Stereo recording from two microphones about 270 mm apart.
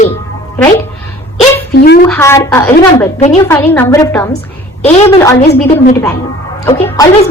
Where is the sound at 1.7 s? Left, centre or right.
Left.